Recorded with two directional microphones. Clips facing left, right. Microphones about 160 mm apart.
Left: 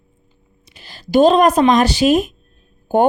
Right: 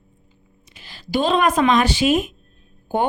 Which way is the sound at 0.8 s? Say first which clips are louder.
Left 9 dB; 40° left (ahead or behind).